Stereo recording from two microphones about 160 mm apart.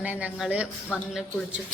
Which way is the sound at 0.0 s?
10° right (ahead or behind).